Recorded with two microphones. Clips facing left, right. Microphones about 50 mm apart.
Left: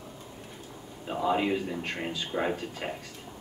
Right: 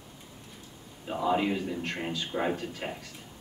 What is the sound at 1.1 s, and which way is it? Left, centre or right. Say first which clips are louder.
A man's voice: even; centre.